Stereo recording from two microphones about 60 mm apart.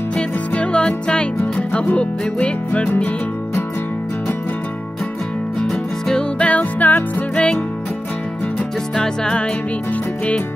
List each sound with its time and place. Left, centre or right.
0.1 s music: left
5.6 s music: centre
6.4 s music: left
8.9 s music: centre